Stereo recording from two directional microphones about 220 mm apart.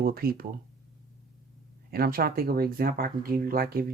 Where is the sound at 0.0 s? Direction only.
45° right (ahead or behind).